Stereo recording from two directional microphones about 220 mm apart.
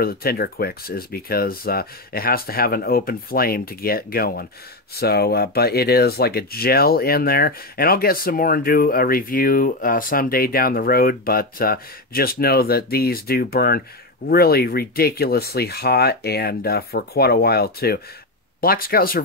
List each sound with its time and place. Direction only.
0.0 s speech: 45° left (ahead or behind)